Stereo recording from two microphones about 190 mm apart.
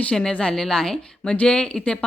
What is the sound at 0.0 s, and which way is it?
A woman's voice, 5° left (ahead or behind).